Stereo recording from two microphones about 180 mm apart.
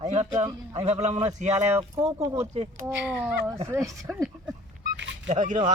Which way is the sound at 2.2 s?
20° right (ahead or behind).